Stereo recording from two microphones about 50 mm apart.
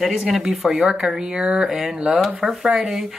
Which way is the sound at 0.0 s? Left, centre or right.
Centre.